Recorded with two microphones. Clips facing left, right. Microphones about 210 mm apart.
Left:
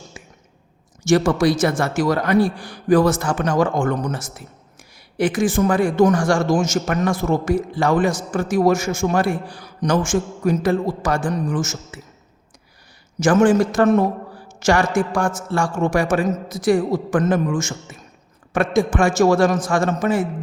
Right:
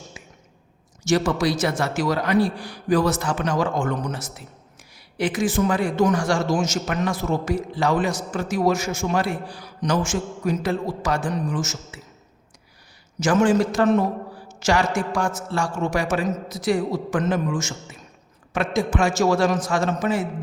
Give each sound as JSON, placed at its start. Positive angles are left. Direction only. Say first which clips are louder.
{"t": 0.1, "sound": "a sound", "louder": "left 3 dB", "side_deg": 50}
{"t": 1.0, "sound": "a man's voice", "louder": "left 5 dB", "side_deg": 50}
{"t": 13.1, "sound": "a man's voice", "louder": "left 4 dB", "side_deg": 50}